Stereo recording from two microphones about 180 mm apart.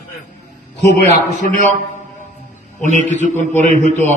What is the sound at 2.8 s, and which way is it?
Speech, 45° right (ahead or behind).